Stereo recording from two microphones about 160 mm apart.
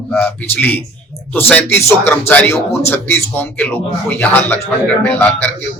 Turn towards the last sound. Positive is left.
turn(degrees=10)  # may be behind; listen again after turning